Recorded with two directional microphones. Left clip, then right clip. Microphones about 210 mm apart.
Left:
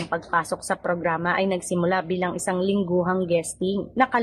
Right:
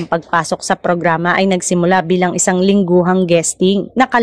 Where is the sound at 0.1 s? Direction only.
40° right (ahead or behind).